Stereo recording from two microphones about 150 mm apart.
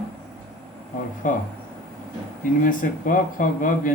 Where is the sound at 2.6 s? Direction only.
65° left (ahead or behind).